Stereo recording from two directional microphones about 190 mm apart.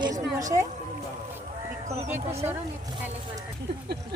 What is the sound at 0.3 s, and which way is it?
Music, 15° right (ahead or behind).